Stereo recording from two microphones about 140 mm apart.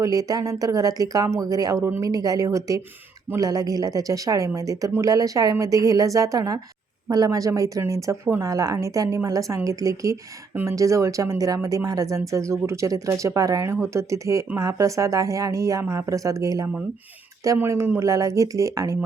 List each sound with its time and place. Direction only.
0.0 s speech: 25° right (ahead or behind)